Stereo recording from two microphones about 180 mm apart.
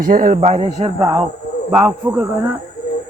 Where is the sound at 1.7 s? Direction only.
10° right (ahead or behind).